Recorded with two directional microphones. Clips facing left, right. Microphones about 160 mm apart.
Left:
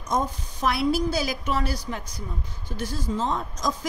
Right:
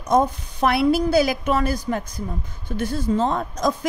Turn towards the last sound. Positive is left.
turn(degrees=-60)  # may be behind; listen again after turning